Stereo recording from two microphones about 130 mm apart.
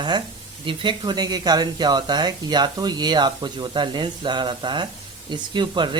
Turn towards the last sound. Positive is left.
turn(degrees=-35)  # may be behind; listen again after turning